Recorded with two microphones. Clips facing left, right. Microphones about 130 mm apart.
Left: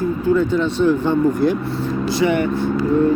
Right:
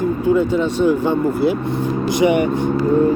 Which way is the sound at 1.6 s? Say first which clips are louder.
Right 2 dB; 20° right (ahead or behind).